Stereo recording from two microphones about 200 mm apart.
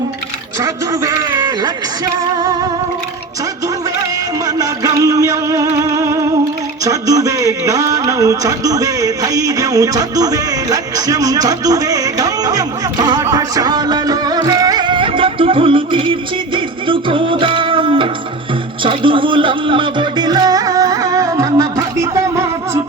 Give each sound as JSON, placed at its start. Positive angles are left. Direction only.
{"t": 0.6, "sound": "a man's voice", "side_deg": -20}
{"t": 4.4, "sound": "music", "side_deg": -15}
{"t": 6.8, "sound": "a sound", "side_deg": -15}
{"t": 16.6, "sound": "music", "side_deg": -25}